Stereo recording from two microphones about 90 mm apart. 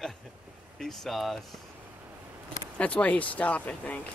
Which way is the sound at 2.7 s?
15° left (ahead or behind).